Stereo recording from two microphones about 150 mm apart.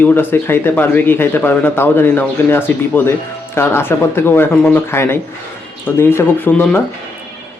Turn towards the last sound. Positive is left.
turn(degrees=10)  # may be behind; listen again after turning